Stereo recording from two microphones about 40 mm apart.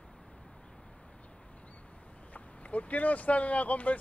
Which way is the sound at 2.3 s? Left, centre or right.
Left.